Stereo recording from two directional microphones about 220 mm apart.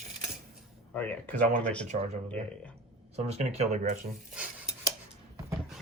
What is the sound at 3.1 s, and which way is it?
Speech, 30° right (ahead or behind).